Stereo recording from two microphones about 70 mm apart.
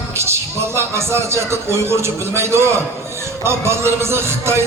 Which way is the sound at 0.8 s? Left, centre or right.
Right.